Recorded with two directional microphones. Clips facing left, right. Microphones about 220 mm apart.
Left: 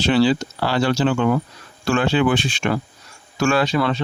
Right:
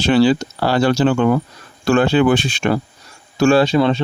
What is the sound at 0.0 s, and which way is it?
Speech, 50° right (ahead or behind).